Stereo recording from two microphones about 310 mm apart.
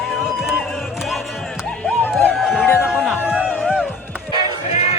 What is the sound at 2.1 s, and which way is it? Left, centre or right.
Music, centre.